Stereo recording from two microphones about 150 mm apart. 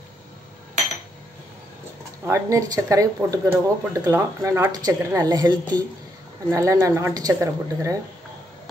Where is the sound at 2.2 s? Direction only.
20° right (ahead or behind).